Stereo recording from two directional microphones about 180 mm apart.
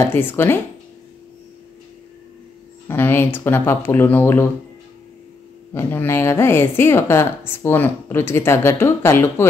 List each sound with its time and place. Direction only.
0.0 s speech: 10° left (ahead or behind)
2.9 s speech: 10° left (ahead or behind)
5.7 s speech: 10° left (ahead or behind)